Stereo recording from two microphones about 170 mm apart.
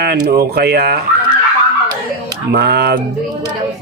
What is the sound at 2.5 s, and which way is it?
Speech, 70° right (ahead or behind).